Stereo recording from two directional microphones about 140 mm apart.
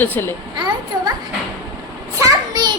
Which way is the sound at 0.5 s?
30° right (ahead or behind).